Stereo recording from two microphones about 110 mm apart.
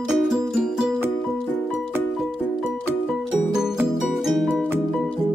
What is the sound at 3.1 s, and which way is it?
Music, 5° right (ahead or behind).